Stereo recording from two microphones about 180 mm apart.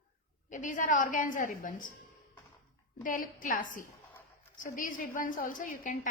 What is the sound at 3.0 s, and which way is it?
A woman's voice, 50° left (ahead or behind).